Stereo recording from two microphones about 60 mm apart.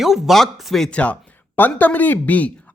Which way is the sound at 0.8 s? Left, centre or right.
Left.